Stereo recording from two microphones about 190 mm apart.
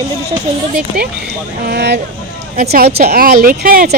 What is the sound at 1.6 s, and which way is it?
Speech, 60° right (ahead or behind).